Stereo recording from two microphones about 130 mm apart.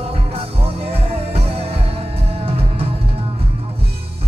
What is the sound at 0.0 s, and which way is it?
Music, 50° right (ahead or behind).